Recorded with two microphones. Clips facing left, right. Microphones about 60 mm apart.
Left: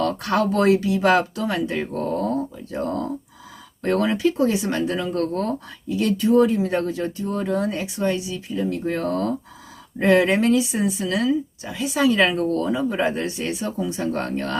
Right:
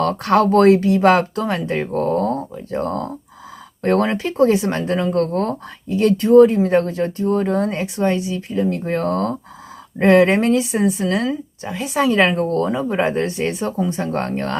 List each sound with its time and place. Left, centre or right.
0.0 s speech: right